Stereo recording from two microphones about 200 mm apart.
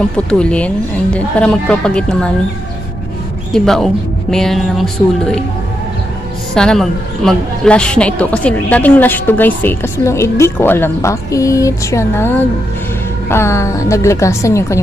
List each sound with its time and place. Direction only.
0.3 s speech: 5° left (ahead or behind)
3.5 s speech: centre (ahead or behind)
6.5 s a woman's voice: 5° left (ahead or behind)